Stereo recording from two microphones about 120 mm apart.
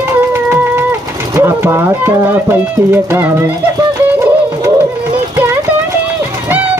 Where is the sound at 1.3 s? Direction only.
20° right (ahead or behind).